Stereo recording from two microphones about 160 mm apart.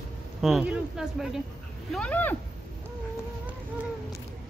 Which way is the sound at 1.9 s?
10° left (ahead or behind).